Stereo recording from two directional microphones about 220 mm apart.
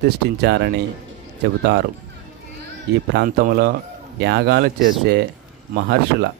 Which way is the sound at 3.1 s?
45° right (ahead or behind).